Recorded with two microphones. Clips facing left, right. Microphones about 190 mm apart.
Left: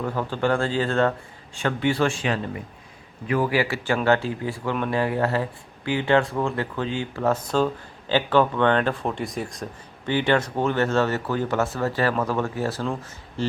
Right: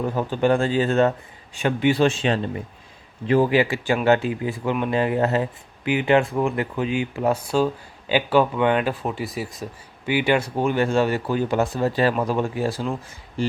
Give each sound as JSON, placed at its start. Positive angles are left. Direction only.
{"t": 0.0, "sound": "speech", "side_deg": -15}